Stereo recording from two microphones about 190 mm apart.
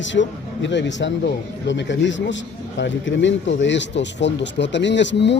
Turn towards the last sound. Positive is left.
turn(degrees=65)  # may be behind; listen again after turning